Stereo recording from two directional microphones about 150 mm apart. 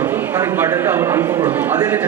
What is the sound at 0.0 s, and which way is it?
A man's voice, 15° right (ahead or behind).